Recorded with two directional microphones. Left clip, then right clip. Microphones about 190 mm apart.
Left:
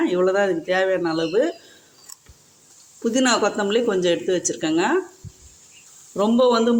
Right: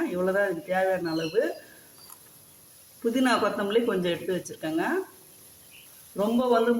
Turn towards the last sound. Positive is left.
turn(degrees=55)  # may be behind; listen again after turning